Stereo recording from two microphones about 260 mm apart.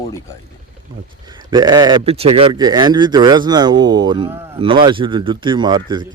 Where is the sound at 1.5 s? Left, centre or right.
Centre.